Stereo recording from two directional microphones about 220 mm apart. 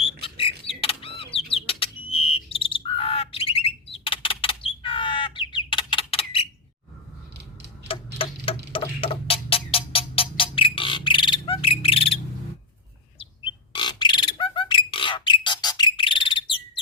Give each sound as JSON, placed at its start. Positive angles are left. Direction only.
{"t": 0.2, "sound": "squawk", "side_deg": 25}
{"t": 1.5, "sound": "bird", "side_deg": 25}
{"t": 7.9, "sound": "clock", "side_deg": 25}
{"t": 13.1, "sound": "bird", "side_deg": 20}